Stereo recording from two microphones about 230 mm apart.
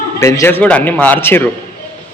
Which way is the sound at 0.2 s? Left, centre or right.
Centre.